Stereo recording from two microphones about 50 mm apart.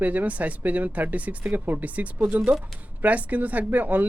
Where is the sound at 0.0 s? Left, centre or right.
Right.